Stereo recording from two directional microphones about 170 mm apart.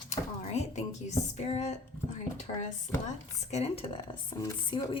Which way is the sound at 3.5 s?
35° left (ahead or behind).